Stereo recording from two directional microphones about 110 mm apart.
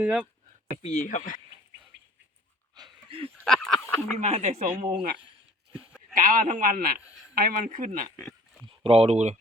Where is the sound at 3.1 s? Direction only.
60° right (ahead or behind).